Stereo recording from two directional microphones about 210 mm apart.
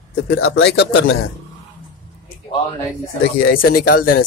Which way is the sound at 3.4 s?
45° left (ahead or behind).